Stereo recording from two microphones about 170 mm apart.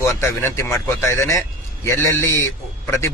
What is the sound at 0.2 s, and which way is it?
Speech, 15° left (ahead or behind).